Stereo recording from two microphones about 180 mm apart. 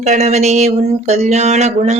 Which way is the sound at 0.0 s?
40° right (ahead or behind).